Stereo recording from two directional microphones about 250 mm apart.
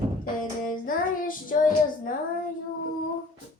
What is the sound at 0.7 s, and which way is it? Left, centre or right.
Child singing, left.